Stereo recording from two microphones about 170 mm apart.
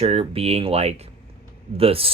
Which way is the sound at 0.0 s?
35° right (ahead or behind).